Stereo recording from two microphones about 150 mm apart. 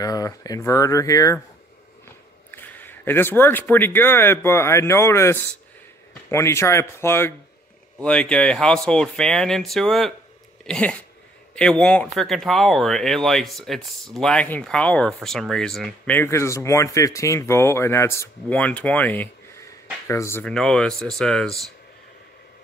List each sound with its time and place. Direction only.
0.0 s speech: 25° left (ahead or behind)
2.5 s speech: 15° left (ahead or behind)
16.2 s speech: 20° left (ahead or behind)
20.4 s speech: 5° left (ahead or behind)